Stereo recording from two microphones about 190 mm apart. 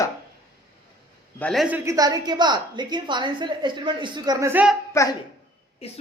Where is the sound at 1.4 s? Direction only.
5° left (ahead or behind).